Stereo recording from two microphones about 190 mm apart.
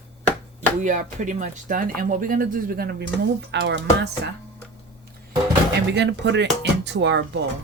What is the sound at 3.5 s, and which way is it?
Speech, 65° right (ahead or behind).